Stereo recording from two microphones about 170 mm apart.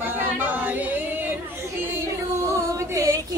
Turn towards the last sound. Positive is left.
turn(degrees=-15)  # may be behind; listen again after turning